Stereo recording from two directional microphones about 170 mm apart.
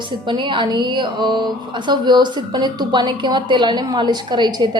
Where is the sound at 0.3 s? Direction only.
25° right (ahead or behind).